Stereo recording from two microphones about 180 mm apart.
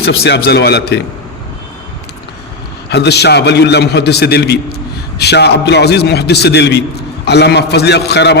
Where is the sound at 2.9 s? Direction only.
65° left (ahead or behind).